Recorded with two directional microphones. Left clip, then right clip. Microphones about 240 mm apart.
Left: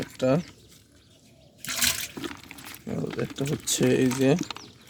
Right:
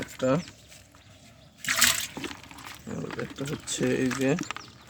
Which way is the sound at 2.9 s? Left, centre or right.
Left.